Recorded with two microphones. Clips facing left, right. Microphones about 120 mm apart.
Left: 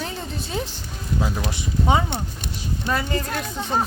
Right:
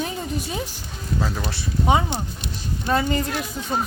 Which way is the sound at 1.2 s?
15° left (ahead or behind).